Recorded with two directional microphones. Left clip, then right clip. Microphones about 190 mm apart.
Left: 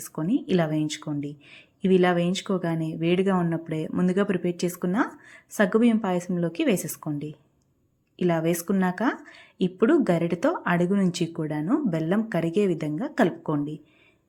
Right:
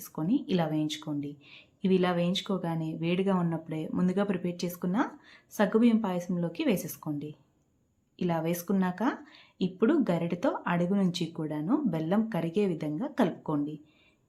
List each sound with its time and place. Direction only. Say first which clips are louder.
0.0 s speech: left 3 dB; 20° left (ahead or behind)